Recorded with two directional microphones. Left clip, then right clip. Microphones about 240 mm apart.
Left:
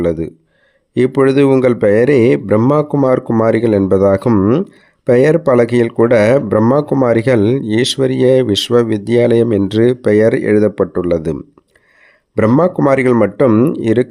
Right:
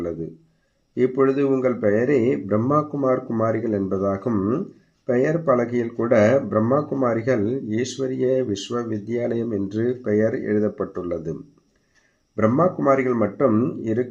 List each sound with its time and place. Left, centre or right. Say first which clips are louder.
0.0 s speech: left 12 dB; left
12.4 s speech: left 8 dB; left